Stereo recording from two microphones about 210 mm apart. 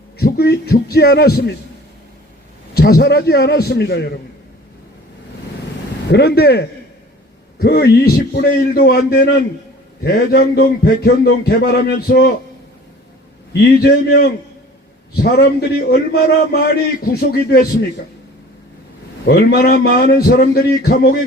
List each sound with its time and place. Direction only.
0.2 s a man's voice: 50° left (ahead or behind)
2.7 s a man's voice: 45° left (ahead or behind)
6.1 s a man's voice: 50° left (ahead or behind)
13.5 s a man's voice: 50° left (ahead or behind)
19.2 s a man's voice: 50° left (ahead or behind)